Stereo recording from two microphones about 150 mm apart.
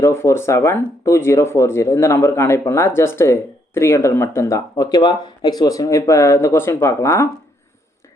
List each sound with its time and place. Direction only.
0.0 s speech: 20° left (ahead or behind)